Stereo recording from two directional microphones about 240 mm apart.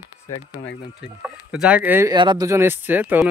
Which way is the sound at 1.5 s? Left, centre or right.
Centre.